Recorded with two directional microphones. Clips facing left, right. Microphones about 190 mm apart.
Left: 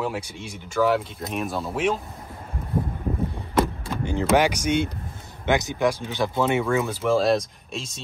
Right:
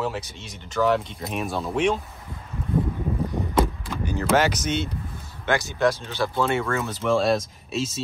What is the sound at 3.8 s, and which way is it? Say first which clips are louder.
Speech: left 2 dB; 20° left (ahead or behind).